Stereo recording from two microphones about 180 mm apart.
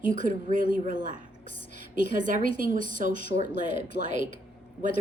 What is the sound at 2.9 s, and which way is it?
A woman's voice, 45° right (ahead or behind).